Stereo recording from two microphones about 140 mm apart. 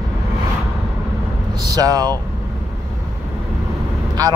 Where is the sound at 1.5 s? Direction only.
30° right (ahead or behind).